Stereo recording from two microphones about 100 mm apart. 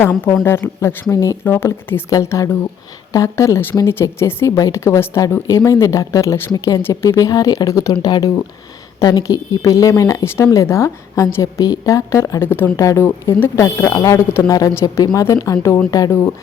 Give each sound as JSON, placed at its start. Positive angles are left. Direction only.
{"t": 0.4, "sound": "a woman's voice", "side_deg": 25}
{"t": 2.0, "sound": "a woman's voice", "side_deg": 35}
{"t": 14.7, "sound": "a woman's voice", "side_deg": 25}